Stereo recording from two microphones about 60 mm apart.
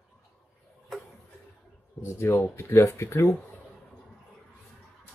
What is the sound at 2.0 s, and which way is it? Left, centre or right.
Speech, left.